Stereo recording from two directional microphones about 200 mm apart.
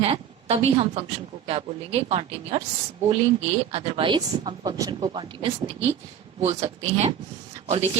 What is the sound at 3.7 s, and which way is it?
A woman's voice, 25° right (ahead or behind).